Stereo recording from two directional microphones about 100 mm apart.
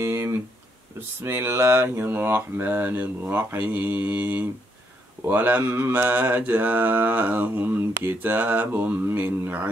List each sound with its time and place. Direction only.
0.0 s a sound: 25° right (ahead or behind)
0.9 s speech: 20° right (ahead or behind)
5.2 s mantra: 15° right (ahead or behind)